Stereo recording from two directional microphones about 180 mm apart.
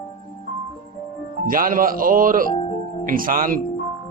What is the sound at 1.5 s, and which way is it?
A man's voice, 50° right (ahead or behind).